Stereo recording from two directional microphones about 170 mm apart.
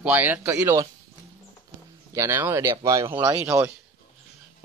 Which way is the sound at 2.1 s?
15° right (ahead or behind).